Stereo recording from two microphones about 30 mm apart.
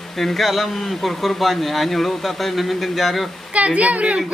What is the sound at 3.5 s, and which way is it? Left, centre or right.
Speech, right.